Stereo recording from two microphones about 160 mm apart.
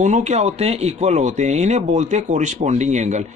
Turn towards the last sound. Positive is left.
turn(degrees=-45)  # may be behind; listen again after turning